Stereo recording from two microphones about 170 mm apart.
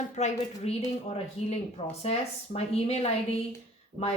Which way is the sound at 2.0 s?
35° left (ahead or behind).